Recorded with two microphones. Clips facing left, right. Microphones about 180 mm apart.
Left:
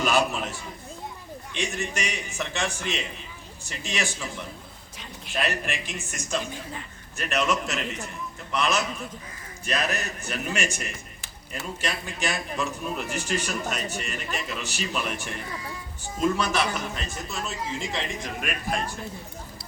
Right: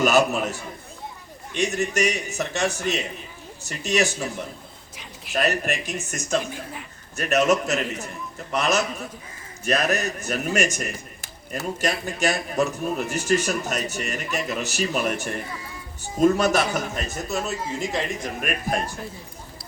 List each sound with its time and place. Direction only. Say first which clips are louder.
0.0 s a man's voice: right 5 dB; 40° right (ahead or behind)
1.5 s a man's voice: right 7 dB; 40° right (ahead or behind)
5.3 s a man's voice: right 5 dB; 45° right (ahead or behind)